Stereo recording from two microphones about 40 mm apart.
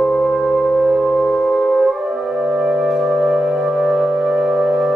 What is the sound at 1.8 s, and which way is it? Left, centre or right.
Music, centre.